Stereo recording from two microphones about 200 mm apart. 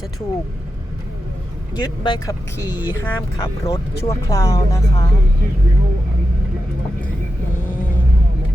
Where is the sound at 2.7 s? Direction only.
10° right (ahead or behind).